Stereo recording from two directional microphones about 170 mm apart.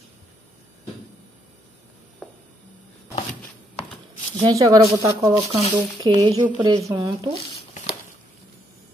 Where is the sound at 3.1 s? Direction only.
45° left (ahead or behind).